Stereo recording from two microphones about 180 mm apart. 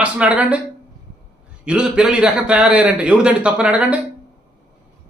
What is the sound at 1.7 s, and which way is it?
A man's voice, 5° right (ahead or behind).